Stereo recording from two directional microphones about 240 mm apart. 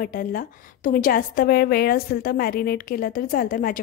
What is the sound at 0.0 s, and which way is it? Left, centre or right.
A woman's voice, left.